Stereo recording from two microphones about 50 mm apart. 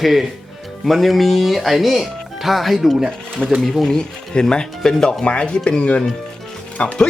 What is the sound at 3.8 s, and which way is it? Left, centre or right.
Speech, centre.